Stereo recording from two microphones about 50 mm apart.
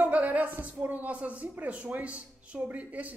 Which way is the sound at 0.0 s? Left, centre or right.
Right.